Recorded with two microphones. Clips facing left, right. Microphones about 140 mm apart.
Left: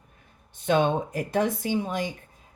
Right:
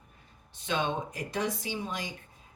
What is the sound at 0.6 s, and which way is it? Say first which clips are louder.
Speech: left 8 dB; 50° left (ahead or behind).